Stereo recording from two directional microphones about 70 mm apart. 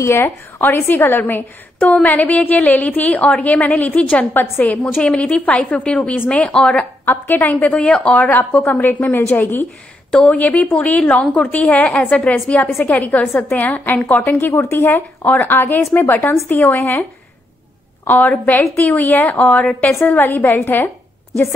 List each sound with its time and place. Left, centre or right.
0.0 s a woman's voice: left
0.6 s a woman's voice: left
5.3 s a woman's voice: centre
7.1 s a woman's voice: left
10.2 s a woman's voice: centre
18.0 s a woman's voice: left
19.0 s speech: left
19.5 s a woman's voice: centre
19.9 s a woman's voice: left